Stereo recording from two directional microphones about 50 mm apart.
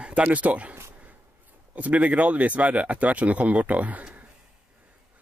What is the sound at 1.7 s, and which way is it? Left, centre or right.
Speech, right.